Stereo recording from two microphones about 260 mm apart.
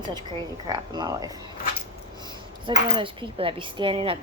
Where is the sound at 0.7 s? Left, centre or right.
Centre.